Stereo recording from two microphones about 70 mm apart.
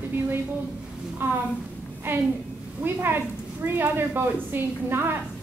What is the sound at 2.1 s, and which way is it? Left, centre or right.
A woman's voice, right.